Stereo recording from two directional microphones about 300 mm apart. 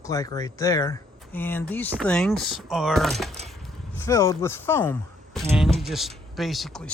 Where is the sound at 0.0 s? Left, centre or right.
Centre.